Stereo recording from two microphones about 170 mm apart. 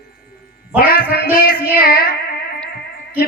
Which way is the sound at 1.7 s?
55° left (ahead or behind).